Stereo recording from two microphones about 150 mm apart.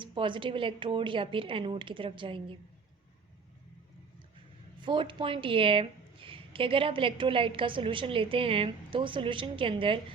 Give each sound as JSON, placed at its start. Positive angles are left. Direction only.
{"t": 0.0, "sound": "a woman's voice", "side_deg": -35}
{"t": 4.8, "sound": "a woman's voice", "side_deg": -35}